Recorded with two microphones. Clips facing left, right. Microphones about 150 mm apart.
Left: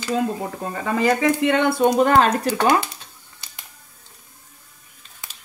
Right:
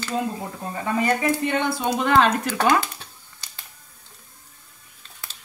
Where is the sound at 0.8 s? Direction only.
90° left; by 1.9 s 60° left (ahead or behind).